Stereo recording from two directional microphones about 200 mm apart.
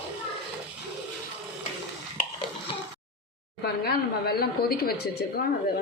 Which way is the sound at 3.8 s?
50° left (ahead or behind).